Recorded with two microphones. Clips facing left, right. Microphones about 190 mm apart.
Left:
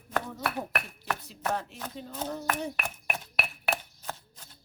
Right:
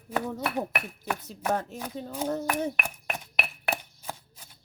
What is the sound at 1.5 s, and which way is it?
Speech, 45° right (ahead or behind).